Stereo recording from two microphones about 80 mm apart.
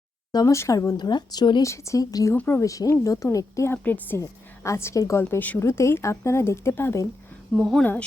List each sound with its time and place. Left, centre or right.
0.5 s speech: left
0.9 s a woman's voice: left
1.6 s speech: left
3.8 s a woman's voice: left
4.2 s a woman's voice: left
7.5 s speech: centre
7.8 s speech: centre